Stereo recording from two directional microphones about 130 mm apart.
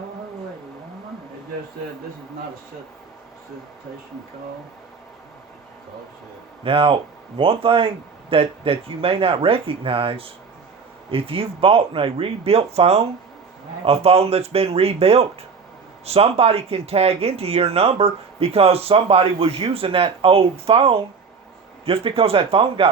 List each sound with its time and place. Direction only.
6.7 s speech: 45° right (ahead or behind)